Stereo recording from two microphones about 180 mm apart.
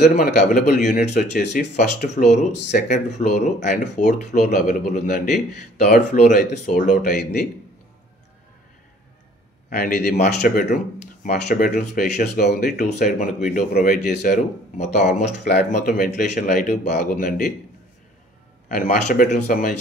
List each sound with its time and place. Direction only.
0.0 s speech: 45° left (ahead or behind)
9.7 s a man's voice: 55° left (ahead or behind); by 15.2 s 40° left (ahead or behind)
15.8 s speech: 50° left (ahead or behind)
18.7 s speech: 55° left (ahead or behind)